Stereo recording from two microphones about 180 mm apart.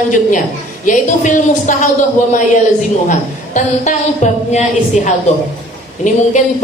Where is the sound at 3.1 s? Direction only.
40° left (ahead or behind).